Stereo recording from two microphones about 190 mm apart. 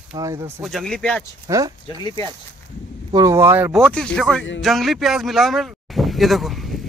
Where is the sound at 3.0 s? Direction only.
20° right (ahead or behind).